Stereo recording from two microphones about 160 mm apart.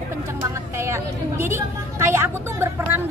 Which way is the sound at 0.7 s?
15° right (ahead or behind).